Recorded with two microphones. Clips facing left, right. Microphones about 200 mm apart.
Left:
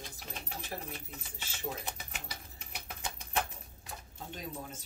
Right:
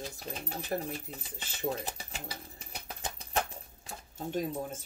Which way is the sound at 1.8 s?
35° right (ahead or behind).